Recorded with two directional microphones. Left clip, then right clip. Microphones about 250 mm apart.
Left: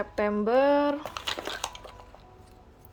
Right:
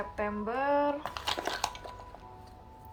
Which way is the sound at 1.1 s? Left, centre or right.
Centre.